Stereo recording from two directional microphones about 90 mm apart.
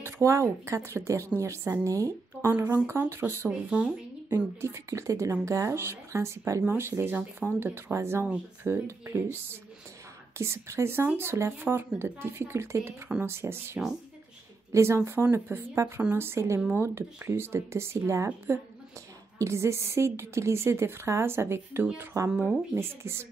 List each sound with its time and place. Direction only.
0.0 s a woman's voice: 35° right (ahead or behind)
3.4 s speech: 10° right (ahead or behind)
4.6 s a woman's voice: 30° right (ahead or behind)
22.2 s a woman's voice: 40° right (ahead or behind)
22.8 s speech: 30° right (ahead or behind)